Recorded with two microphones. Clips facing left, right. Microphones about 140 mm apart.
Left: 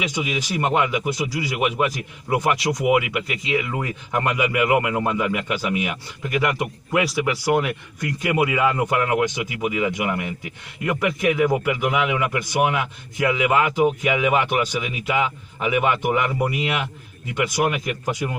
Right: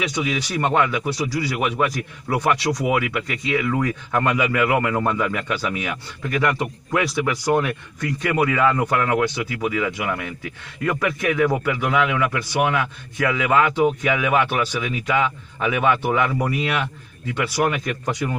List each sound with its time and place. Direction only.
0.2 s speech: 15° left (ahead or behind)